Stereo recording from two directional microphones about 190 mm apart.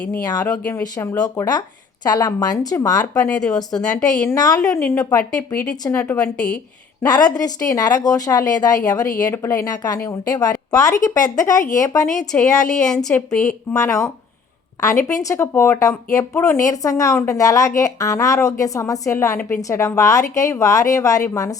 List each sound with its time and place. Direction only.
0.6 s speech: 15° left (ahead or behind)
3.2 s a woman's voice: 5° left (ahead or behind)
4.4 s speech: 20° left (ahead or behind)
7.0 s speech: 20° left (ahead or behind)
12.3 s a woman's voice: 5° left (ahead or behind)
13.7 s speech: 15° left (ahead or behind)